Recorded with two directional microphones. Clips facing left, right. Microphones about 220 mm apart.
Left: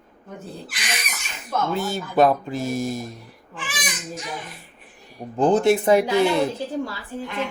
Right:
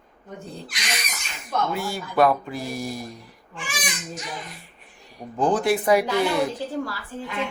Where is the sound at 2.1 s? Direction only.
20° left (ahead or behind).